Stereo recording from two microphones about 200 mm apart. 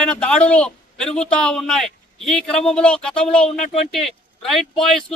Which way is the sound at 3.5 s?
30° left (ahead or behind).